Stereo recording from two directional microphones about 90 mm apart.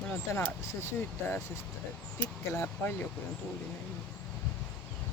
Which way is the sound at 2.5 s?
25° left (ahead or behind).